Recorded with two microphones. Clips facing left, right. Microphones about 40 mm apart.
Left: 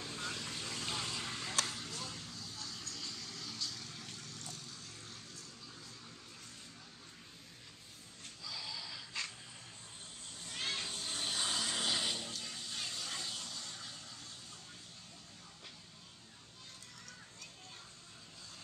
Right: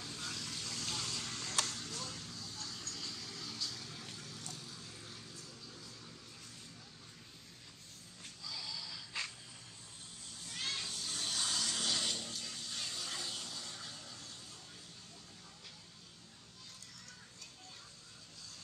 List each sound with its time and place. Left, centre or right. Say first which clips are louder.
0.0 s vehicle: left 2 dB; left; by 5.4 s centre
8.5 s snort: left 1 dB; centre
10.4 s vehicle: left 1 dB; centre